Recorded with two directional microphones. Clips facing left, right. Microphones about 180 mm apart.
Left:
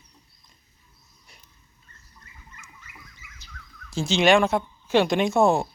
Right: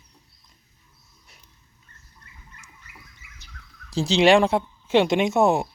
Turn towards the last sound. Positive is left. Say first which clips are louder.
# right 1 dB
turn(degrees=-20)  # may be behind; listen again after turning